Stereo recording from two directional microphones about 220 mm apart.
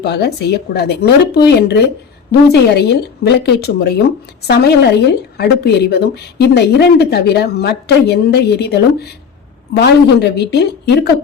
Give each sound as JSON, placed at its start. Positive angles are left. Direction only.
{"t": 0.0, "sound": "speech", "side_deg": 50}